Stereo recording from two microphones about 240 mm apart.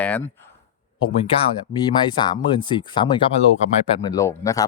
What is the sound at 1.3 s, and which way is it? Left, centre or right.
Speech, left.